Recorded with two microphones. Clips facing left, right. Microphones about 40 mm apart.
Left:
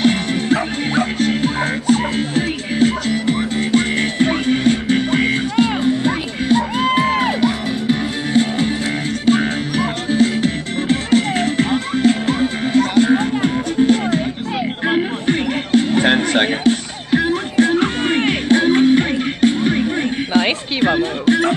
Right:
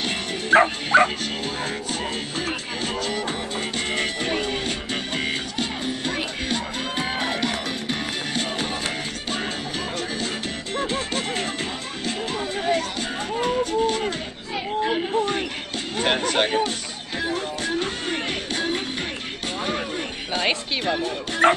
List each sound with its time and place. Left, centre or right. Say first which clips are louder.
0.0 s music: left 11 dB; left
0.5 s music: right 5 dB; right
1.2 s music: left 10 dB; left
7.3 s music: left 8 dB; centre
9.2 s music: left 12 dB; left